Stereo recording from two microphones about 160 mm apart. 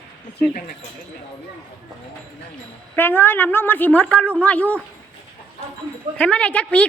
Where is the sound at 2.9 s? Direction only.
15° left (ahead or behind).